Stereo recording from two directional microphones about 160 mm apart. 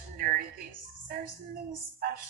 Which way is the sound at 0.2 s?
60° right (ahead or behind).